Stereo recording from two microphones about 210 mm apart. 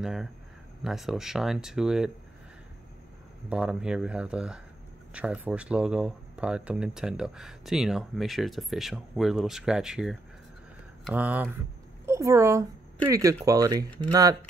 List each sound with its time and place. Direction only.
0.0 s speech: centre (ahead or behind)
3.4 s a woman's voice: 5° right (ahead or behind)